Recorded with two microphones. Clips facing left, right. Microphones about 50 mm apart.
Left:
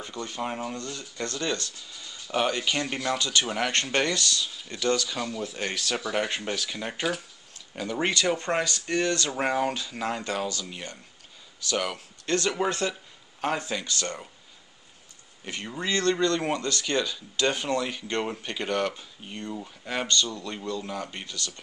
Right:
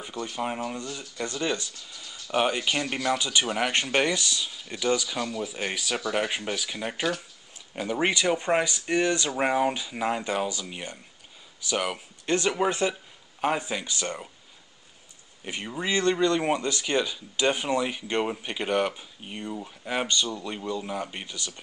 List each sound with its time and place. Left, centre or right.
0.0 s speech: centre
15.4 s speech: centre